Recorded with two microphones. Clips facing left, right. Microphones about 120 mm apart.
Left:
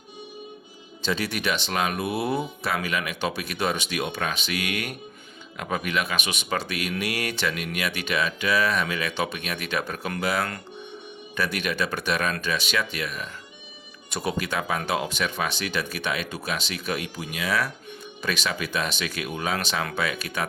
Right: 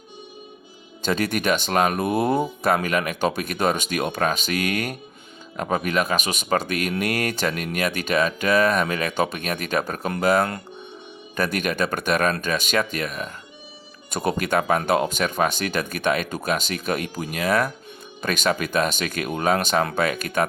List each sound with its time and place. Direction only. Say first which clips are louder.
1.0 s speech: right 5 dB; 50° right (ahead or behind)